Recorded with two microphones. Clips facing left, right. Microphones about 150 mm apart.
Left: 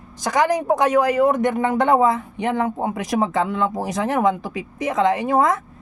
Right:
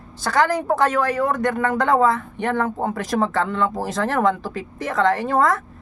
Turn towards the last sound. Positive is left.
turn(degrees=20)  # may be behind; listen again after turning